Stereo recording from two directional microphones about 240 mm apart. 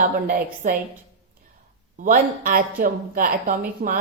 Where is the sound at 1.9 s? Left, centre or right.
Right.